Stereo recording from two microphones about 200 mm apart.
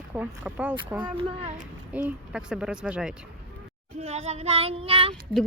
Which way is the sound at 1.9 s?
5° right (ahead or behind).